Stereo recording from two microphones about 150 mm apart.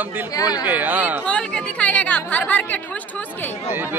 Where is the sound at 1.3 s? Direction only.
10° left (ahead or behind).